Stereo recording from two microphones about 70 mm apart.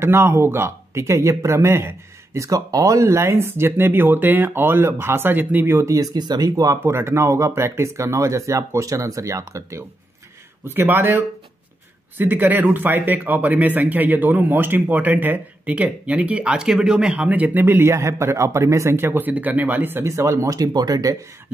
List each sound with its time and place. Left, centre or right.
0.0 s speech: right
3.1 s speech: right
6.1 s speech: right
6.8 s speech: right
10.7 s speech: right
20.1 s speech: right
20.5 s speech: right